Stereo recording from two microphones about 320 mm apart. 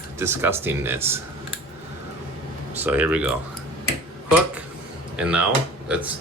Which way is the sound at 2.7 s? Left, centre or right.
Centre.